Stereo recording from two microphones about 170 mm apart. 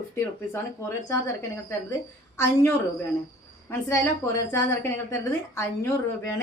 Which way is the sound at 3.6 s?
15° left (ahead or behind).